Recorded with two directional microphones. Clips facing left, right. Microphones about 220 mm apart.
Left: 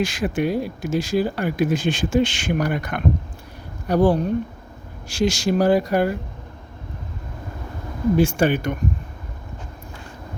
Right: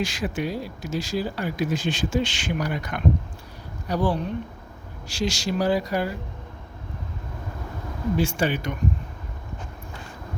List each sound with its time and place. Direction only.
0.0 s speech: 55° left (ahead or behind)
8.1 s speech: 50° left (ahead or behind)